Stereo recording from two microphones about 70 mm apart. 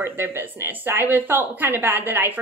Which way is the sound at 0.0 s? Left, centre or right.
Right.